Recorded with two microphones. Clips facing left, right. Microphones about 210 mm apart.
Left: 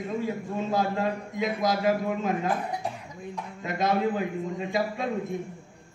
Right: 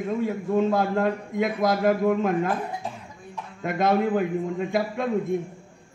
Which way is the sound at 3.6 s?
55° right (ahead or behind).